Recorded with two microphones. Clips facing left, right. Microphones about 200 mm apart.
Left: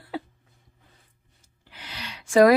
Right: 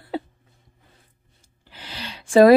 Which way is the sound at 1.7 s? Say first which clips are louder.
Right 3 dB; 30° right (ahead or behind).